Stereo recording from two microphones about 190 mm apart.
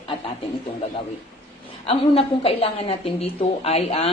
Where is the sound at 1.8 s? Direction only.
30° left (ahead or behind).